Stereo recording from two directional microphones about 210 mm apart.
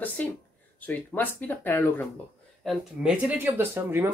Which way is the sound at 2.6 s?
Centre (ahead or behind).